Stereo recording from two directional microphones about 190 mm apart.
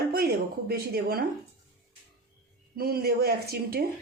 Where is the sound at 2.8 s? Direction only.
55° right (ahead or behind).